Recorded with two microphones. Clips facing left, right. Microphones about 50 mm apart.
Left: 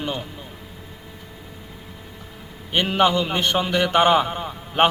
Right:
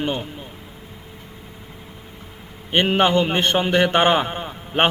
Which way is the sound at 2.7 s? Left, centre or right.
Right.